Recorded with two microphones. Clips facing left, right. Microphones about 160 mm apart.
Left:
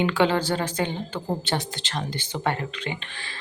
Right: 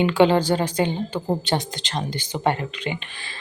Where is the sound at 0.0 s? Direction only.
15° right (ahead or behind).